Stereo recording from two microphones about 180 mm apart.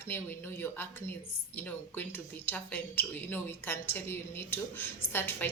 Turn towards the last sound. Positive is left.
turn(degrees=10)  # may be behind; listen again after turning